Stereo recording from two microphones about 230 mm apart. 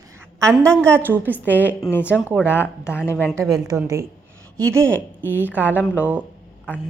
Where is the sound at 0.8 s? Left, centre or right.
Centre.